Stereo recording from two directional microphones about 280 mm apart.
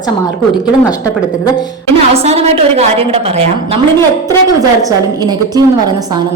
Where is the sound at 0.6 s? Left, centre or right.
Centre.